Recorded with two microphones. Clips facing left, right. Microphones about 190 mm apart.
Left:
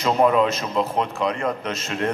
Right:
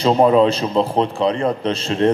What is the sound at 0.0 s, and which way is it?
A man's voice, 30° right (ahead or behind).